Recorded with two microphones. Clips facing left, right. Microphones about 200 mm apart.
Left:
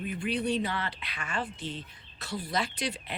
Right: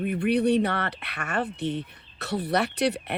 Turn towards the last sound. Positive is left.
turn(degrees=-65)  # may be behind; listen again after turning